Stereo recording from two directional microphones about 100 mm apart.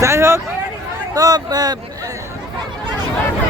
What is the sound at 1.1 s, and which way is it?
Speech, 40° right (ahead or behind).